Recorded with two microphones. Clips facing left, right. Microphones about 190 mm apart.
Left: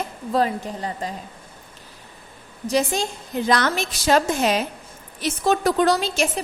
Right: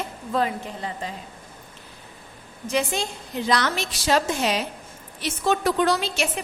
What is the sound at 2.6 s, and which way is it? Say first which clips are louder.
A woman's voice: left 3 dB; 40° left (ahead or behind).